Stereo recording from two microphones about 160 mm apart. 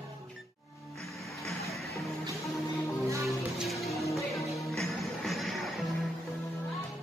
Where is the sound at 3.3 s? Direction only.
Centre (ahead or behind).